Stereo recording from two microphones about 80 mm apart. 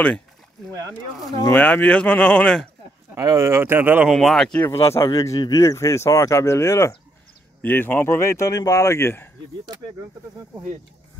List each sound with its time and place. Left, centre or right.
1.5 s speech: centre
3.2 s speech: right
4.1 s speech: centre
4.6 s speech: left
7.6 s speech: left
9.7 s speech: right